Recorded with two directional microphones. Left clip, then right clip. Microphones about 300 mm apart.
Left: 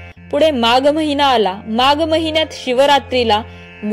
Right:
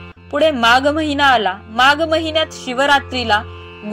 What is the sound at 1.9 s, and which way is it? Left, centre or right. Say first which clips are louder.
Speech: left 2 dB; centre.